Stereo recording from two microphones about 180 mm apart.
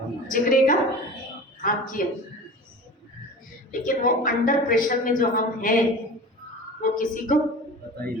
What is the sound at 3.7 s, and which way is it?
A woman's voice, 50° left (ahead or behind).